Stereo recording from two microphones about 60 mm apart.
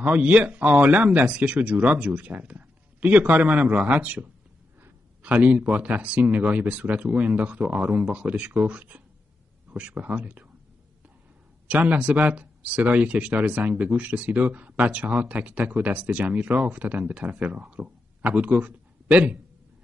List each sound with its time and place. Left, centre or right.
0.0 s speech: right
11.6 s speech: right